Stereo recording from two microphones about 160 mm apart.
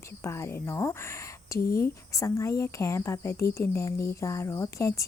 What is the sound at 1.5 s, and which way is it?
Speech, 65° left (ahead or behind).